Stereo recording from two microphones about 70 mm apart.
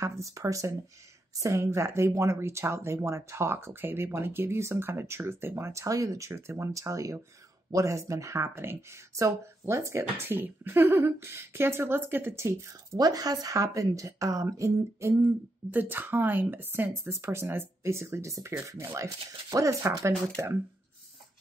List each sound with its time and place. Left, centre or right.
0.0 s speech: right
12.9 s speech: right
20.4 s speech: right